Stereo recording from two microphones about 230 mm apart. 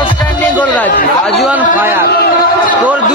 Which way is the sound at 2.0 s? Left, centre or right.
Left.